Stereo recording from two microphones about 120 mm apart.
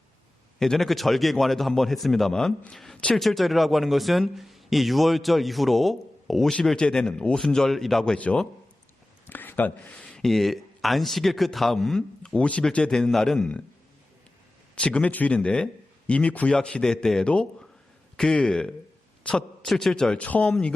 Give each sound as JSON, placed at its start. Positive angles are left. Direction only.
{"t": 0.6, "sound": "speech", "side_deg": 0}
{"t": 9.2, "sound": "a sound", "side_deg": 15}
{"t": 10.2, "sound": "speech", "side_deg": 0}
{"t": 14.8, "sound": "a man's voice", "side_deg": 10}